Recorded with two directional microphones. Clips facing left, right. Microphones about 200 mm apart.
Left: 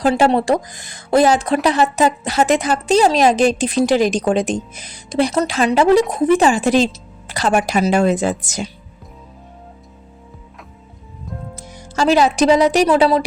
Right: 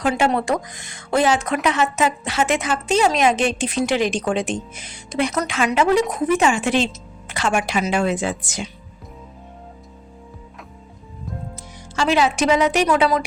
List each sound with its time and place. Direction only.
0.0 s speech: 35° left (ahead or behind)
11.5 s speech: 40° left (ahead or behind)